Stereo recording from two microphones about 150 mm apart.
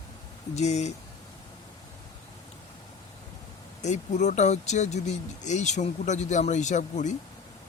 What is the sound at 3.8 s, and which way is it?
Speech, 50° left (ahead or behind).